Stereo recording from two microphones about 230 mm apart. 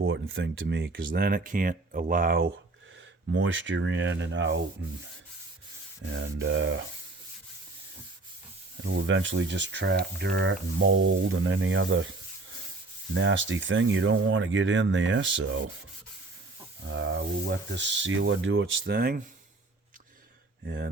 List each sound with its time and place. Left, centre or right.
0.0 s speech: right
3.3 s speech: right
6.0 s speech: right
8.8 s speech: right
13.1 s speech: right
17.7 s speech: right
20.7 s speech: right